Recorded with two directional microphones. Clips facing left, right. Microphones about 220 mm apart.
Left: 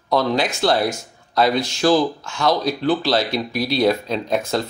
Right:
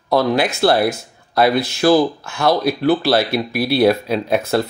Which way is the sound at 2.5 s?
10° right (ahead or behind).